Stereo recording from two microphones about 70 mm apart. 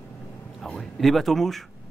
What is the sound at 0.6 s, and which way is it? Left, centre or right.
Speech, centre.